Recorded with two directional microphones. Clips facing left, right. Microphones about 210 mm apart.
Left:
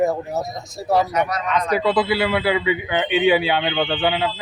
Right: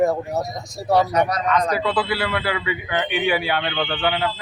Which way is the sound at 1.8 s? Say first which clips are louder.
Left 4 dB; 20° left (ahead or behind).